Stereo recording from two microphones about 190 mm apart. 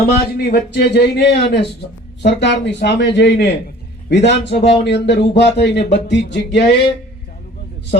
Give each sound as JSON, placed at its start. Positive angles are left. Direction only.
{"t": 0.3, "sound": "speech", "side_deg": 55}